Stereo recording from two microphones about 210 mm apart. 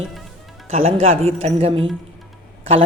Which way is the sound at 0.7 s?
30° right (ahead or behind).